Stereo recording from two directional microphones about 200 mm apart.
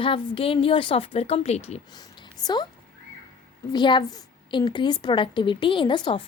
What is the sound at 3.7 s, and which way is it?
A woman's voice, 20° left (ahead or behind).